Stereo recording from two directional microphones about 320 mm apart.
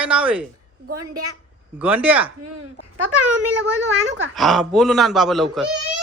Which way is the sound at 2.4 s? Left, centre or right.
Right.